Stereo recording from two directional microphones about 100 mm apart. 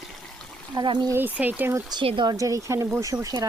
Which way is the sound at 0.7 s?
45° right (ahead or behind).